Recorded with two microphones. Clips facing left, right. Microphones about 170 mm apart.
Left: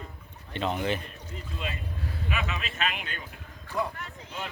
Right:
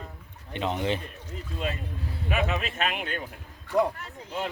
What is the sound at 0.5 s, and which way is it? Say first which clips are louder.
Speech: right 1 dB; 20° right (ahead or behind).